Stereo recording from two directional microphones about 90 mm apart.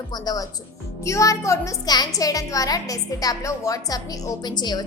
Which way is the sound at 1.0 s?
35° left (ahead or behind).